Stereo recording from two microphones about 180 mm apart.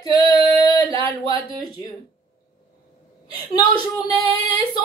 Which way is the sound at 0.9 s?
30° right (ahead or behind).